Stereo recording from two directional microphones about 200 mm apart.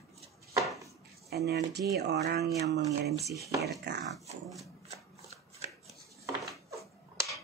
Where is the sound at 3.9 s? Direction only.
55° right (ahead or behind).